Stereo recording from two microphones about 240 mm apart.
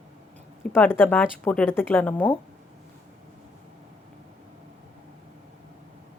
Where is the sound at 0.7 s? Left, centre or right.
Centre.